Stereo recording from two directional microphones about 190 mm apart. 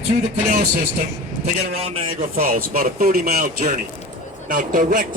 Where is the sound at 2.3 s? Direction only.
50° right (ahead or behind).